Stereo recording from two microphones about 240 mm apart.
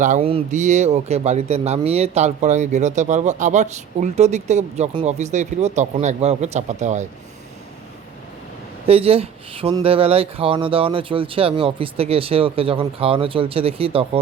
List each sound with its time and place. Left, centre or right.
0.0 s speech: right
8.9 s speech: right